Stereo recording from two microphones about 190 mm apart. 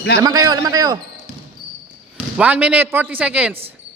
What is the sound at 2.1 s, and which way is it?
Speech, 10° right (ahead or behind).